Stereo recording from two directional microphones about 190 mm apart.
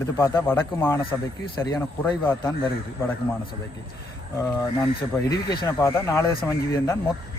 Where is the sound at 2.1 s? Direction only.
20° left (ahead or behind).